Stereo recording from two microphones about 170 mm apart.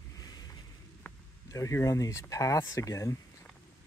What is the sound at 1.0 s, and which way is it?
Speech, 20° left (ahead or behind).